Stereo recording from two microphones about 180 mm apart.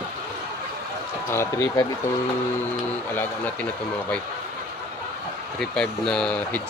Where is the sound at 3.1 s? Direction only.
10° left (ahead or behind).